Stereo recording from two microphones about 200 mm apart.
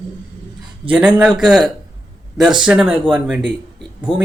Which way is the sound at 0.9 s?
5° right (ahead or behind).